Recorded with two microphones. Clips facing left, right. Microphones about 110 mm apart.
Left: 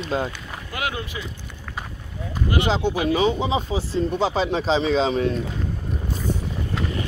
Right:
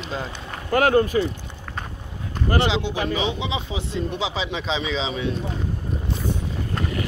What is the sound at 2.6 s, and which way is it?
Speech, 45° left (ahead or behind).